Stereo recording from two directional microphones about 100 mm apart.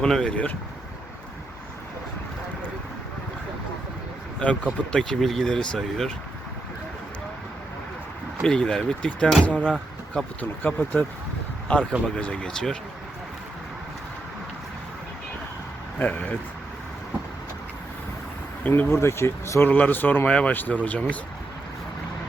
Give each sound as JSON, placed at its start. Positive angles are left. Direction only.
{"t": 0.0, "sound": "speech", "side_deg": 10}
{"t": 4.9, "sound": "speech", "side_deg": 5}
{"t": 8.4, "sound": "speech", "side_deg": 10}
{"t": 10.6, "sound": "speech", "side_deg": 15}
{"t": 16.0, "sound": "speech", "side_deg": 15}
{"t": 18.6, "sound": "speech", "side_deg": 20}